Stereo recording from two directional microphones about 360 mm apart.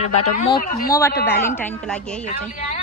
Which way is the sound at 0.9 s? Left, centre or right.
Centre.